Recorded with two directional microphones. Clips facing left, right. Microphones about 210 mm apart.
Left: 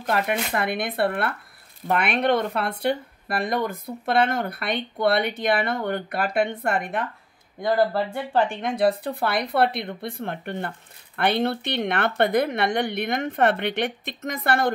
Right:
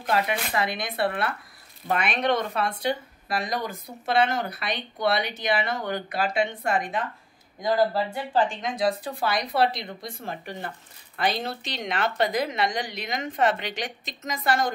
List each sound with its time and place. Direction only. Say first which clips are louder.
0.1 s speech: left 1 dB; 55° left (ahead or behind)